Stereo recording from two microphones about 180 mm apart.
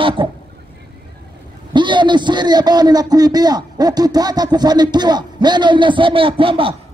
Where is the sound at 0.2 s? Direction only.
30° right (ahead or behind).